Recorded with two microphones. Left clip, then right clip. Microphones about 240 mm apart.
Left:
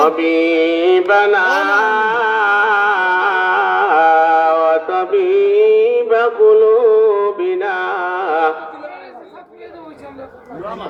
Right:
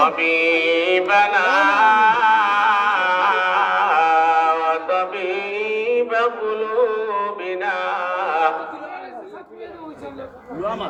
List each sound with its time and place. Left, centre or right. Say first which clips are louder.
0.0 s mantra: left 3 dB; right
1.6 s music: even; right